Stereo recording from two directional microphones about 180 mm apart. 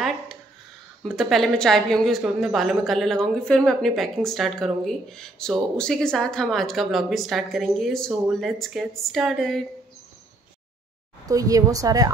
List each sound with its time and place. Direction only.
1.0 s a woman's voice: centre (ahead or behind)
11.2 s speech: 20° right (ahead or behind)